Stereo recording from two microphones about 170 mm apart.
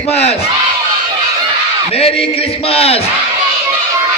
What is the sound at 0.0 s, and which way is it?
Speech, 35° left (ahead or behind).